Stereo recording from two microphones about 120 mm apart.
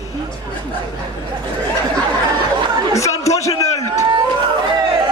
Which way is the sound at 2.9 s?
25° left (ahead or behind).